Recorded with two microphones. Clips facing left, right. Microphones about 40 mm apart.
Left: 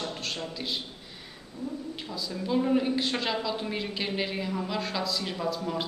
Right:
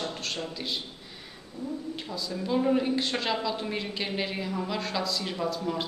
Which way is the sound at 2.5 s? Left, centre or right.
Centre.